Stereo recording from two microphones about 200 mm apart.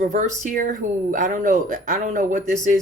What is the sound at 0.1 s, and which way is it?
Speech, 40° right (ahead or behind).